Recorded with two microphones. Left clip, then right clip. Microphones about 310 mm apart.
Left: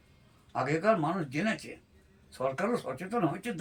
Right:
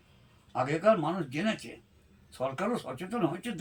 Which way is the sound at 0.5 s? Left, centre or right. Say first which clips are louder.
Even; centre.